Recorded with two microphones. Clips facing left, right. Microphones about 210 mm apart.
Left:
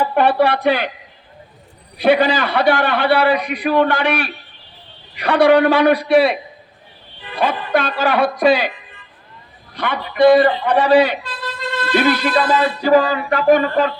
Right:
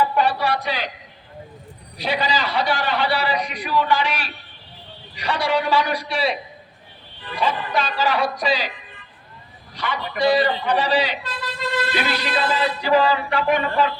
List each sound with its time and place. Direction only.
0.1 s speech: 55° left (ahead or behind)
2.0 s a man's voice: 55° left (ahead or behind)
7.3 s a man's voice: 60° left (ahead or behind)
9.7 s a man's voice: 55° left (ahead or behind)